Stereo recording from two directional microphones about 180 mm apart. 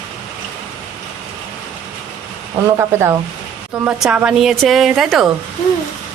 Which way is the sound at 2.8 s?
15° right (ahead or behind).